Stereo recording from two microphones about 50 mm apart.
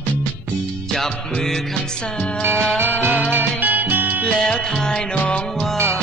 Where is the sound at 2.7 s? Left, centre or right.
Right.